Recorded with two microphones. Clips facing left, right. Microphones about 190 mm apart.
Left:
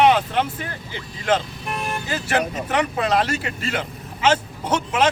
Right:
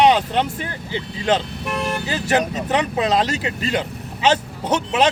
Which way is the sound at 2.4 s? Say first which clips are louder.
Left 1 dB; 20° right (ahead or behind).